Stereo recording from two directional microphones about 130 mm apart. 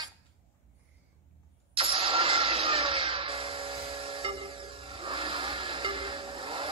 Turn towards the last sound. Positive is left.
turn(degrees=-40)  # may be behind; listen again after turning